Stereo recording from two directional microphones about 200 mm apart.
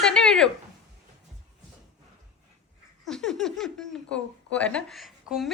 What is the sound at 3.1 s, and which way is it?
Speech, centre (ahead or behind).